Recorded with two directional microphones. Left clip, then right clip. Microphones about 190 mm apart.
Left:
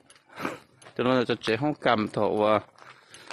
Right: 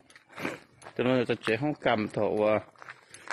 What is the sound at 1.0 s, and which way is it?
Speech, 15° left (ahead or behind).